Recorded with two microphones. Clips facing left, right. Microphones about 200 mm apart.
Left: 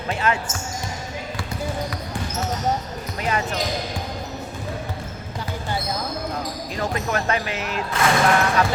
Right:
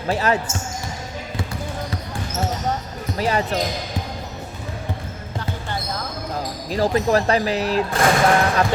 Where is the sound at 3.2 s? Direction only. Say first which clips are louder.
Right 4 dB; 35° right (ahead or behind).